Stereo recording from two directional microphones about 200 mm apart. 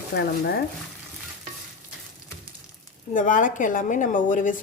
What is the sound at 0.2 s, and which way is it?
Speech, 55° left (ahead or behind).